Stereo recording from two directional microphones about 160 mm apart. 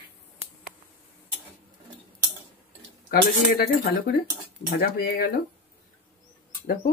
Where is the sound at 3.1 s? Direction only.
70° left (ahead or behind).